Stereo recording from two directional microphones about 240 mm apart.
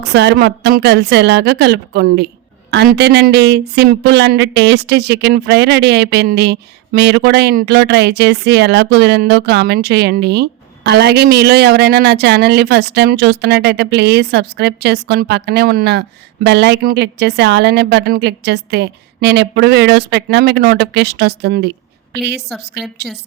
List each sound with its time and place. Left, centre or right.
0.0 s speech: right